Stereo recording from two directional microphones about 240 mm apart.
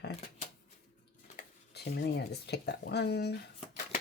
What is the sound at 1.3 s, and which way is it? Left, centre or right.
Speech, left.